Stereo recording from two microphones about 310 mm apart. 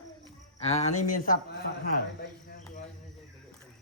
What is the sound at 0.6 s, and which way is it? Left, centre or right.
Speech, left.